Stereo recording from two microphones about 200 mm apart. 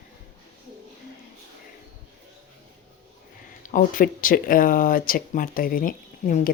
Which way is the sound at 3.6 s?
40° left (ahead or behind).